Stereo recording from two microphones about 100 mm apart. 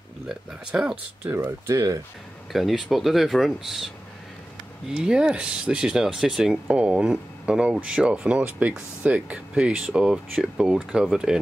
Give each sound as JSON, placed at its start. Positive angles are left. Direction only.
{"t": 0.3, "sound": "speech", "side_deg": -5}
{"t": 1.3, "sound": "speech", "side_deg": -30}
{"t": 2.5, "sound": "speech", "side_deg": 0}
{"t": 4.9, "sound": "speech", "side_deg": -10}